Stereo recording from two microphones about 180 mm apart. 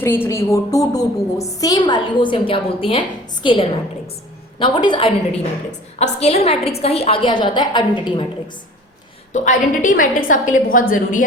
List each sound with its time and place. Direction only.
0.0 s a woman's voice: 15° left (ahead or behind)
9.3 s a woman's voice: 45° left (ahead or behind)